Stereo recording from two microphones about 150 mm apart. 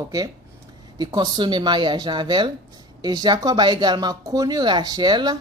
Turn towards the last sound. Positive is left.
turn(degrees=-30)  # may be behind; listen again after turning